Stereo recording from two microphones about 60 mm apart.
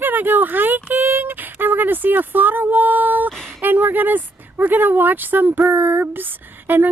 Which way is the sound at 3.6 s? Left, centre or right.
Right.